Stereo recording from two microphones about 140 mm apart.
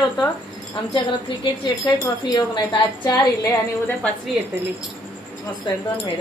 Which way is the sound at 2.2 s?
30° left (ahead or behind).